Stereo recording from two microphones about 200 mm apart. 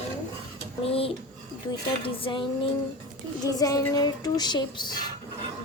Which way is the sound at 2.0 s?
25° left (ahead or behind).